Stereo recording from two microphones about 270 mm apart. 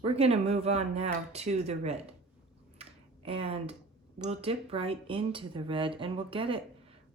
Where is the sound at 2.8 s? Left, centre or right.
Right.